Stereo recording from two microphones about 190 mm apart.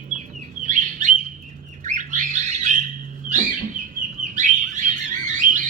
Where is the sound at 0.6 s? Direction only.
40° right (ahead or behind).